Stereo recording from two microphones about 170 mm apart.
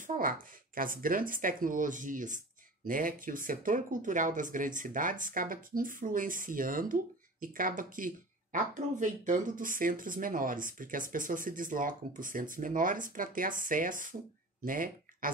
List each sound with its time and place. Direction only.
0.0 s speech: 55° right (ahead or behind)